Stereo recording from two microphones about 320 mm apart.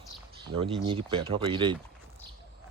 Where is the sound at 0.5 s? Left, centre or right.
Right.